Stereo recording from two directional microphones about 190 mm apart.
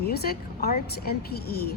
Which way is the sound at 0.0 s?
55° left (ahead or behind).